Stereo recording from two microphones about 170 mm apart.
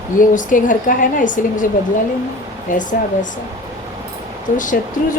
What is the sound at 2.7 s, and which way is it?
Speech, 50° left (ahead or behind).